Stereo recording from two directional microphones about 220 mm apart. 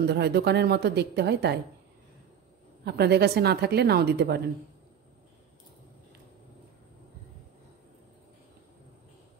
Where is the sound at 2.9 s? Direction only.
50° right (ahead or behind).